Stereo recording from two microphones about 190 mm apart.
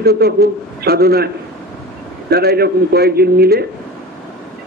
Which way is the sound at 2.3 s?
55° right (ahead or behind).